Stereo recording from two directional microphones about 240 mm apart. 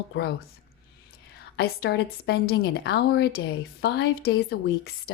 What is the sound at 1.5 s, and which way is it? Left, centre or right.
A woman's voice, left.